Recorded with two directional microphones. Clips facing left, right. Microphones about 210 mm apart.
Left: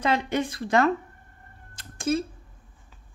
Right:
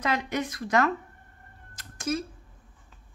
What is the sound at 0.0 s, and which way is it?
Speech, 30° left (ahead or behind).